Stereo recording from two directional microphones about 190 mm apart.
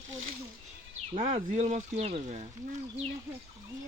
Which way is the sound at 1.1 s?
40° right (ahead or behind).